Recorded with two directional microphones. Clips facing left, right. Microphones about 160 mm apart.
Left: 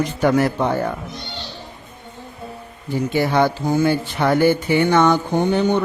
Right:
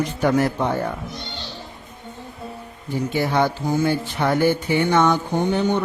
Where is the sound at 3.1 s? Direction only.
85° left.